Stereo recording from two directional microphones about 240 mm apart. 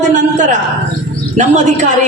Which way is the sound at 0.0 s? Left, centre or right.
Right.